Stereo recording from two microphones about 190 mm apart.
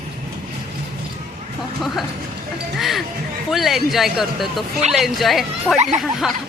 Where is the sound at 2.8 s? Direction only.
Centre (ahead or behind).